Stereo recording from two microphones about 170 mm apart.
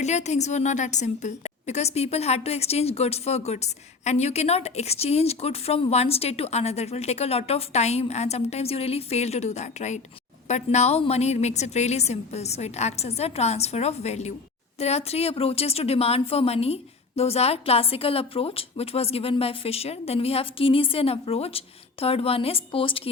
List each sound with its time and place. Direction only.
0.0 s a woman's voice: 40° left (ahead or behind)